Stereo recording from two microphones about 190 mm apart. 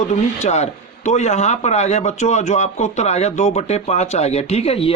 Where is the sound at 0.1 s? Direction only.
40° left (ahead or behind).